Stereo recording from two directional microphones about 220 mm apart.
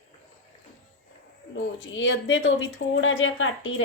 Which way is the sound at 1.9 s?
60° left (ahead or behind).